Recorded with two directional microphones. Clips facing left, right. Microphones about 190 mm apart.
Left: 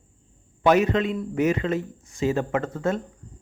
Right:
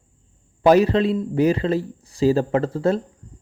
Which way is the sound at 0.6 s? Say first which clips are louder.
Right 4 dB; 35° right (ahead or behind).